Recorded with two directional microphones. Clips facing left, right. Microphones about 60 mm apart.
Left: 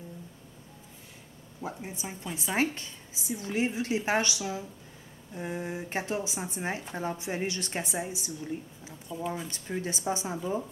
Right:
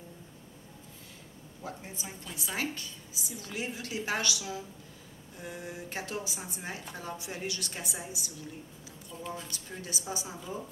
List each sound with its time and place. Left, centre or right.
1.6 s a woman's voice: left
9.1 s a woman's voice: centre
9.5 s speech: left